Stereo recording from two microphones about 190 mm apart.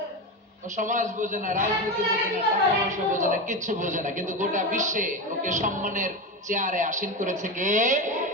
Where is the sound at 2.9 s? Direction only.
40° right (ahead or behind).